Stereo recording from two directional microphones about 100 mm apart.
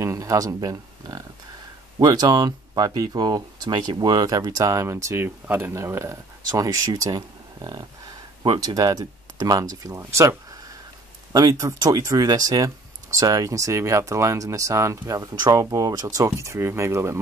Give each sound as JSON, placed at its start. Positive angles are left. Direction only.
{"t": 0.0, "sound": "speech", "side_deg": -35}
{"t": 11.3, "sound": "speech", "side_deg": -35}